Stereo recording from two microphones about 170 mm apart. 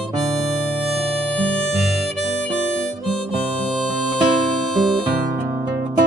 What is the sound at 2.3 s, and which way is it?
Harmonica, 90° left.